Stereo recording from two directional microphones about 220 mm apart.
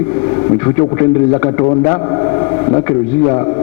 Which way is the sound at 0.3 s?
20° left (ahead or behind).